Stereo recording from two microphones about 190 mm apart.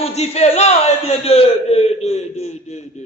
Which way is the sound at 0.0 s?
35° left (ahead or behind).